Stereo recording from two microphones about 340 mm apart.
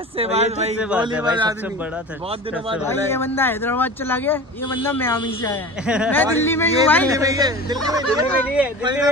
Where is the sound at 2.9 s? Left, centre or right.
Centre.